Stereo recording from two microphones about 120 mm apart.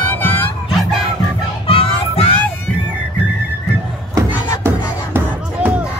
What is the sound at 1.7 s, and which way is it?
Battle cry, 50° left (ahead or behind).